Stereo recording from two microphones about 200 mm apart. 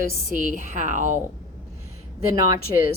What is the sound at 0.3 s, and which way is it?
Speech, 40° right (ahead or behind).